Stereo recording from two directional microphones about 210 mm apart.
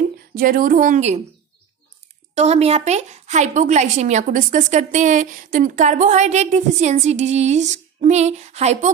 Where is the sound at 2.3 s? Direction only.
30° right (ahead or behind).